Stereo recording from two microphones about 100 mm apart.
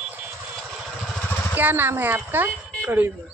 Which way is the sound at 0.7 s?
Centre (ahead or behind).